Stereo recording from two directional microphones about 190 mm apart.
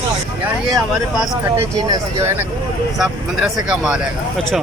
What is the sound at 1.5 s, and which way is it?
Speech, 15° right (ahead or behind).